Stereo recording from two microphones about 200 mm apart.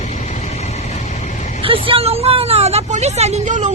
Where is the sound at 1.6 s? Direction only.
25° right (ahead or behind).